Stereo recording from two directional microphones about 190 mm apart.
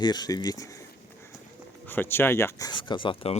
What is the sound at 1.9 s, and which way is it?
Speech, 10° left (ahead or behind).